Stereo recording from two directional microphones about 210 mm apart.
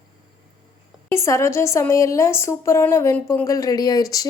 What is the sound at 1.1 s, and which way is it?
A woman's voice, 15° left (ahead or behind).